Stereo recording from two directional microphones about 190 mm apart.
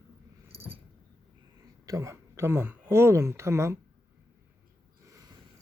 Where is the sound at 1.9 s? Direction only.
15° right (ahead or behind).